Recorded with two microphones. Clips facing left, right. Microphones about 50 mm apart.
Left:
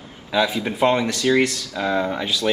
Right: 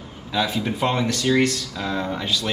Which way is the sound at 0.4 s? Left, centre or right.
Centre.